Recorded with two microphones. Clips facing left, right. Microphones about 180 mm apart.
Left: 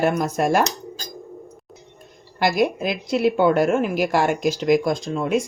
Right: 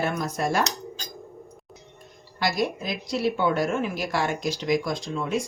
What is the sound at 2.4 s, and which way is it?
A woman's voice, 55° left (ahead or behind).